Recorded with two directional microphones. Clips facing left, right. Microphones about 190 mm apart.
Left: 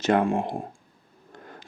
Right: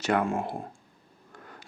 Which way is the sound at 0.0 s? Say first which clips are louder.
Left 4 dB; 20° left (ahead or behind).